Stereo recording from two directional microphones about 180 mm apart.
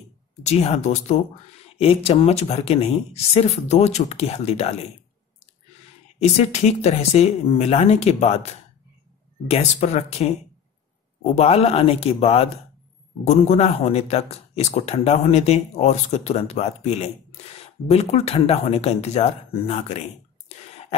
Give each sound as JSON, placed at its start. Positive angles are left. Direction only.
{"t": 0.4, "sound": "speech", "side_deg": 40}
{"t": 6.1, "sound": "speech", "side_deg": 35}
{"t": 11.3, "sound": "speech", "side_deg": 35}